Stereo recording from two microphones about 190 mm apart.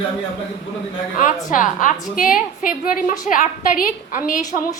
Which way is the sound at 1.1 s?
45° left (ahead or behind).